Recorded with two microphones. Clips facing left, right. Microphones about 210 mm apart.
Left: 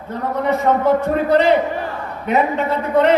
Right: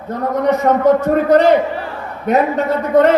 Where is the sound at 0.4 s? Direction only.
40° right (ahead or behind).